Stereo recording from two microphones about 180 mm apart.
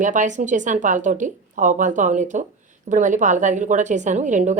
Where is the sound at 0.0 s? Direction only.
45° right (ahead or behind).